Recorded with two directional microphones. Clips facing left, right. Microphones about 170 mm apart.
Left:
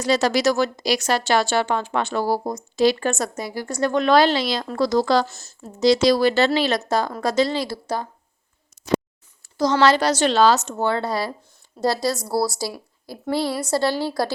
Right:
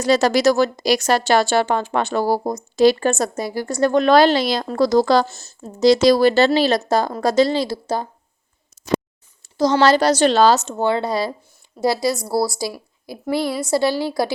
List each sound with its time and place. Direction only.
0.0 s a woman's voice: 45° right (ahead or behind)
5.3 s speech: 25° right (ahead or behind)
5.8 s speech: 40° right (ahead or behind); by 8.0 s 25° right (ahead or behind)
9.4 s speech: 25° right (ahead or behind)
10.6 s a woman's voice: 20° right (ahead or behind)